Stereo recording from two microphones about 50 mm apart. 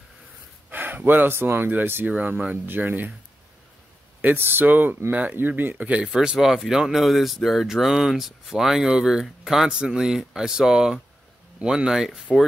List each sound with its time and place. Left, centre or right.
0.7 s speech: right
4.2 s speech: right
6.0 s speech: centre